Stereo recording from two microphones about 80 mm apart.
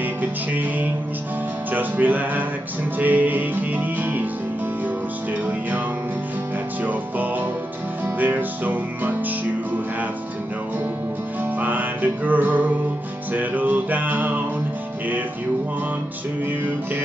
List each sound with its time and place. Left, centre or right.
0.2 s music: right
6.8 s music: right
11.6 s music: right